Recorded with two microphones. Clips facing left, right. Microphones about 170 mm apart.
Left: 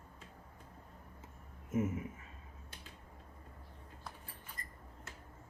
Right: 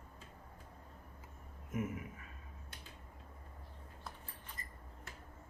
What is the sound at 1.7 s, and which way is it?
Speech, 25° left (ahead or behind).